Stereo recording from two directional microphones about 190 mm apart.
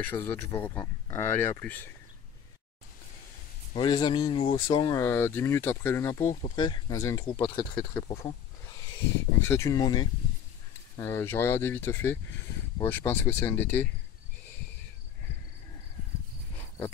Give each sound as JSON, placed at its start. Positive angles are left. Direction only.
{"t": 0.0, "sound": "speech", "side_deg": 10}
{"t": 3.7, "sound": "speech", "side_deg": 25}
{"t": 6.5, "sound": "speech", "side_deg": 25}
{"t": 9.4, "sound": "speech", "side_deg": 15}